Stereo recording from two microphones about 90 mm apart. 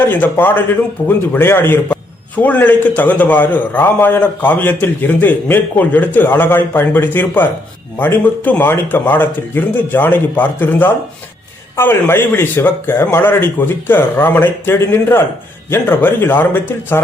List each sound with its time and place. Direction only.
0.0 s a man's voice: 20° left (ahead or behind)